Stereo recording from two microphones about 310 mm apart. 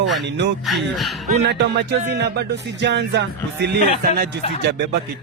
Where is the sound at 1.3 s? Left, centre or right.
Right.